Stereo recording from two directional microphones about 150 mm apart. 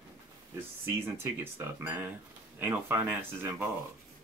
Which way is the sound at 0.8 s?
15° right (ahead or behind).